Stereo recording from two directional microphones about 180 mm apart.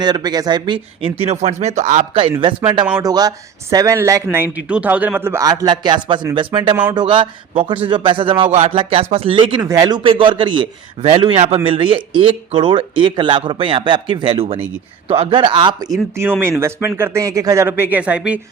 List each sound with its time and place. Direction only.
0.0 s speech: 25° right (ahead or behind)
3.0 s a man's voice: 20° right (ahead or behind)
16.4 s speech: 15° right (ahead or behind)